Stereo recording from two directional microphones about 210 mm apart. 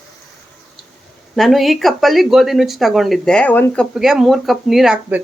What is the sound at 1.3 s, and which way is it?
Speech, centre (ahead or behind).